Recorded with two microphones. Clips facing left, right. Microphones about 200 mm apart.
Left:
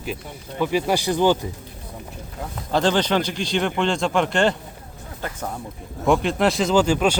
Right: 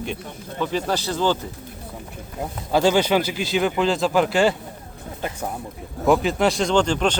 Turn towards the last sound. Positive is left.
turn(degrees=5)  # may be behind; listen again after turning